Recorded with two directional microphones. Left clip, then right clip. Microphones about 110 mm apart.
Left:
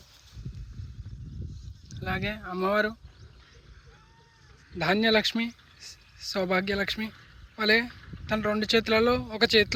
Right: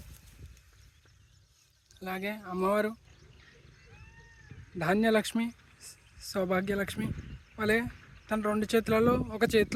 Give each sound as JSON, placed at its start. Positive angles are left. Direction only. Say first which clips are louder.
{"t": 2.0, "sound": "speech", "louder": "left 4 dB", "side_deg": -20}
{"t": 4.8, "sound": "speech", "louder": "left 4 dB", "side_deg": -10}
{"t": 7.1, "sound": "a sound", "louder": "right 3 dB", "side_deg": 0}
{"t": 8.5, "sound": "speech", "louder": "left 4 dB", "side_deg": -10}